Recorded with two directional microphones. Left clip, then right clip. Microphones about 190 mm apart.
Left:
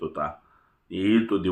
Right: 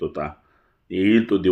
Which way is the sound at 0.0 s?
35° right (ahead or behind).